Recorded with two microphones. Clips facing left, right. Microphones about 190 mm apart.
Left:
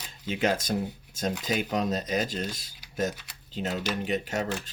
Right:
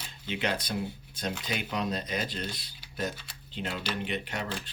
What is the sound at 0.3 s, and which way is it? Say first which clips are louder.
Speech: left 5 dB; 45° left (ahead or behind).